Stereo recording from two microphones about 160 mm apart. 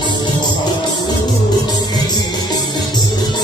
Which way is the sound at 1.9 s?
25° left (ahead or behind).